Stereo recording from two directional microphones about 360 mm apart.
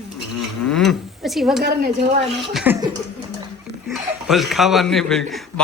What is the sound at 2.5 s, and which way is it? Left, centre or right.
Speech, centre.